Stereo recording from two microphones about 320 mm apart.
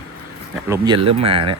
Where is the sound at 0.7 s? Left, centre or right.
Centre.